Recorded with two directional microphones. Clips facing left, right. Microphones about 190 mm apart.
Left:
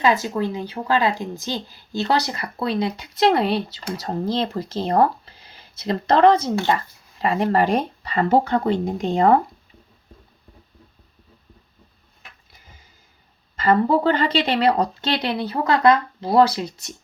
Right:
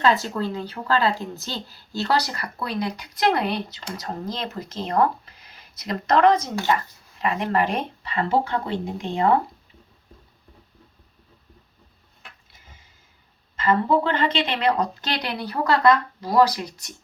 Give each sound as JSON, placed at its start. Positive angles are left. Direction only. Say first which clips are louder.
{"t": 0.0, "sound": "speech", "louder": "left 2 dB", "side_deg": 15}
{"t": 13.6, "sound": "speech", "louder": "left 3 dB", "side_deg": 40}